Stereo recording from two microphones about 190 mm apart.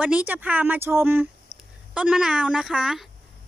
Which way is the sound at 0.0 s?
10° right (ahead or behind).